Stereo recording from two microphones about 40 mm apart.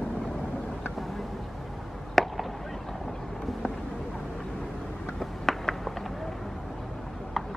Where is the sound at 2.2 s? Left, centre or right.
Centre.